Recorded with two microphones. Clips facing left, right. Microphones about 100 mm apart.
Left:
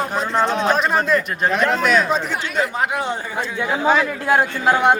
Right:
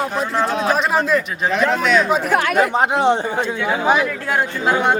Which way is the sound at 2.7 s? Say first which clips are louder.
Right 6 dB; 25° right (ahead or behind).